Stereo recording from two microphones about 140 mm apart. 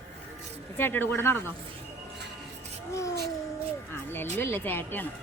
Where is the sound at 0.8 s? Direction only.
15° left (ahead or behind).